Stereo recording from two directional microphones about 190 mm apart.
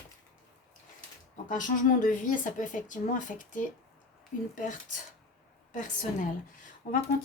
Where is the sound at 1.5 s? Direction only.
45° left (ahead or behind).